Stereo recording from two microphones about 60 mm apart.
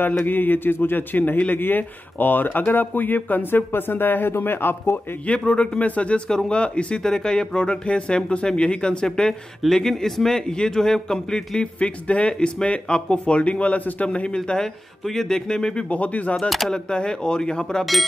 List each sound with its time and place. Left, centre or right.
0.2 s a man's voice: left
5.4 s a man's voice: centre
16.3 s speech: centre
16.7 s a man's voice: centre